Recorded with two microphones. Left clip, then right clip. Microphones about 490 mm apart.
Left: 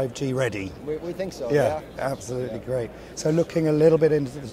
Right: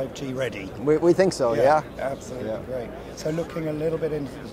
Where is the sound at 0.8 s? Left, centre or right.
Right.